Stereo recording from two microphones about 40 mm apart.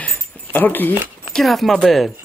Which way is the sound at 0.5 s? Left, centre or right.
Left.